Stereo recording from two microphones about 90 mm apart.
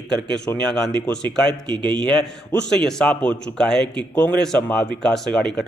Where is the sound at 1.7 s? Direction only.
60° right (ahead or behind).